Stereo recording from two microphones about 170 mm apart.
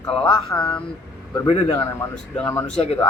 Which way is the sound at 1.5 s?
35° left (ahead or behind).